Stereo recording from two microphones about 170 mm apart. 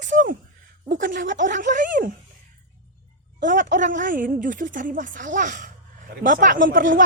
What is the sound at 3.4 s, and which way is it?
Speech, 50° right (ahead or behind).